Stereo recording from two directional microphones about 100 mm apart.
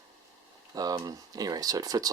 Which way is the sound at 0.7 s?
40° right (ahead or behind).